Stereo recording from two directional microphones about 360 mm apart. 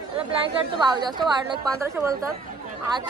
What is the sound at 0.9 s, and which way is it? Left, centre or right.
A woman's voice, centre.